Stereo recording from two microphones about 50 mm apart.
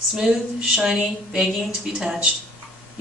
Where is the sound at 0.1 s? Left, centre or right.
Centre.